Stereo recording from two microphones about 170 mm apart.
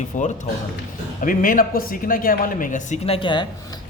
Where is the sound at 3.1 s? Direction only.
30° left (ahead or behind).